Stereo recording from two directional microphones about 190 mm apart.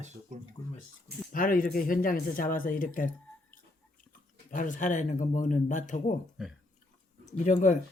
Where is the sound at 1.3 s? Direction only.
45° left (ahead or behind).